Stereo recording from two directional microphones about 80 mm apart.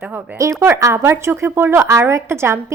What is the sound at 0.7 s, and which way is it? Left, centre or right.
A child's voice, right.